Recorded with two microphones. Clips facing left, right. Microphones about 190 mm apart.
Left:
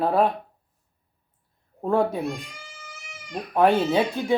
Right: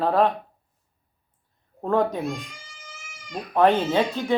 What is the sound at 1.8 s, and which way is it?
Speech, 10° left (ahead or behind).